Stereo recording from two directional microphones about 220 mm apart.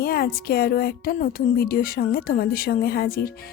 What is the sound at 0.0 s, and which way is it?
Speech, 45° left (ahead or behind).